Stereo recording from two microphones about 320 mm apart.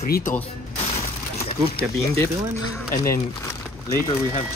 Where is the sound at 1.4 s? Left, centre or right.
Centre.